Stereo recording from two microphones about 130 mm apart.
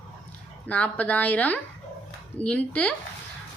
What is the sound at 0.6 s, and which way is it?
A woman's voice, 10° left (ahead or behind).